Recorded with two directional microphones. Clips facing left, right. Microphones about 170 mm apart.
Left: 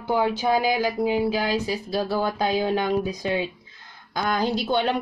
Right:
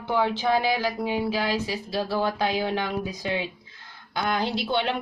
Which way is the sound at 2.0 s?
40° left (ahead or behind).